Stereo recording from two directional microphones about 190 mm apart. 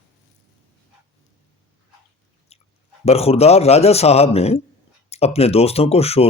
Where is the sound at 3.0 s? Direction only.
30° left (ahead or behind).